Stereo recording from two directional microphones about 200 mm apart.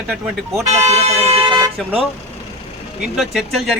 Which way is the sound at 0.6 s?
35° right (ahead or behind).